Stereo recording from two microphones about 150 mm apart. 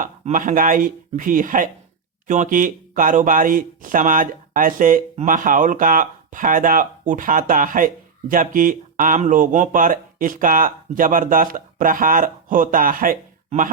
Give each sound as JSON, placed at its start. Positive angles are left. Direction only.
{"t": 0.0, "sound": "speech", "side_deg": -60}